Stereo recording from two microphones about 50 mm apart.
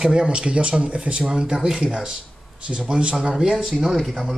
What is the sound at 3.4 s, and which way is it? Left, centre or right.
Speech, centre.